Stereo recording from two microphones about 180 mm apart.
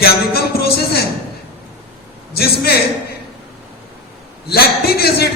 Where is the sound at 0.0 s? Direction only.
60° left (ahead or behind).